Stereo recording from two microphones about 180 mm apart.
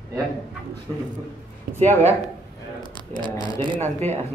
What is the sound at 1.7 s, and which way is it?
Speech, 60° right (ahead or behind).